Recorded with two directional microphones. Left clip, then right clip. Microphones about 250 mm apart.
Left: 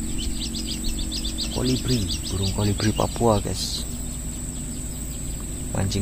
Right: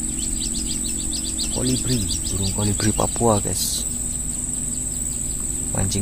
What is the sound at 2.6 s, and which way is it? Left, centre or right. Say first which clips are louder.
Speech: right 1 dB; centre.